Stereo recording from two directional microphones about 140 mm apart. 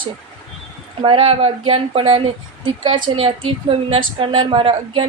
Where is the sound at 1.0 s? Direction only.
40° right (ahead or behind).